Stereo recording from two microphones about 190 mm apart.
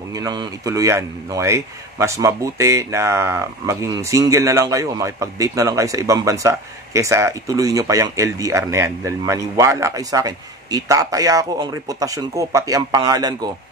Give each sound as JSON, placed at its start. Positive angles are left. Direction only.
{"t": 0.1, "sound": "speech", "side_deg": -20}